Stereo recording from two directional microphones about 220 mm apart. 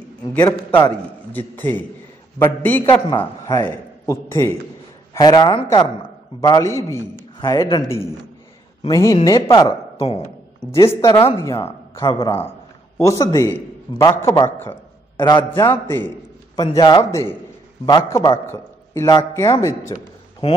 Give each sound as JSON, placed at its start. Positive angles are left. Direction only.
{"t": 0.3, "sound": "a man's voice", "side_deg": 5}
{"t": 10.7, "sound": "a man's voice", "side_deg": 15}
{"t": 12.1, "sound": "a man's voice", "side_deg": 25}